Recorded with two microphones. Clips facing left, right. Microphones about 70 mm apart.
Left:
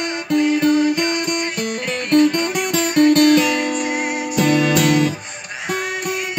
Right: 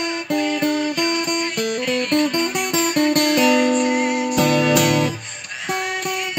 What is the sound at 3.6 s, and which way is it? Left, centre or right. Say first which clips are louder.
Music: right 3 dB; centre.